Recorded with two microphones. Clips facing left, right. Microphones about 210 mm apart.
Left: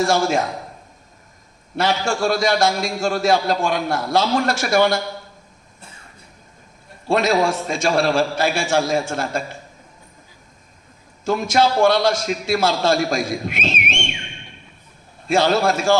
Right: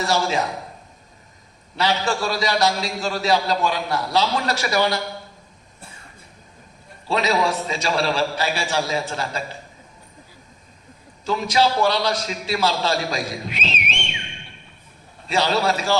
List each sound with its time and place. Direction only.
0.0 s a man's voice: 45° left (ahead or behind)
1.7 s a man's voice: 50° left (ahead or behind)
7.1 s a man's voice: 50° left (ahead or behind)
11.3 s a man's voice: 50° left (ahead or behind)
15.3 s a man's voice: 50° left (ahead or behind)